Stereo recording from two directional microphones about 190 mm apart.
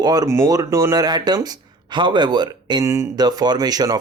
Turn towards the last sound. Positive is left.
turn(degrees=-20)  # may be behind; listen again after turning